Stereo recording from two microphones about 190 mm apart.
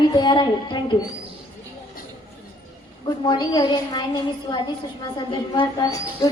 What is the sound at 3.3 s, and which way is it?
A woman's voice, 20° left (ahead or behind).